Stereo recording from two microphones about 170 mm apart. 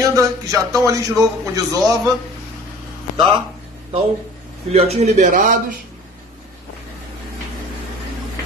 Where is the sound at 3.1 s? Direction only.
25° right (ahead or behind).